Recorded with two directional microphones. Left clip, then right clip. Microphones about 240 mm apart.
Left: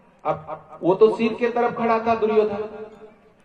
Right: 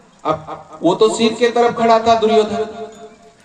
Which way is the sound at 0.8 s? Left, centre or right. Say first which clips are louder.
Right 4 dB; right.